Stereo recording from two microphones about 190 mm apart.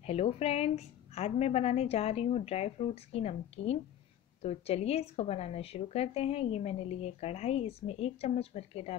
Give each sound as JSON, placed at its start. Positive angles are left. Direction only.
{"t": 0.0, "sound": "a woman's voice", "side_deg": 35}